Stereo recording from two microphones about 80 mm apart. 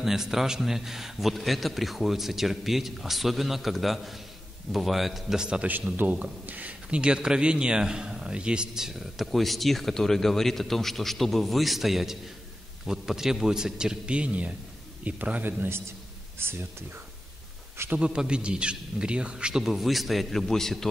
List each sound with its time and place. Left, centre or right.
0.0 s a man's voice: centre; by 16.6 s right
17.7 s a man's voice: centre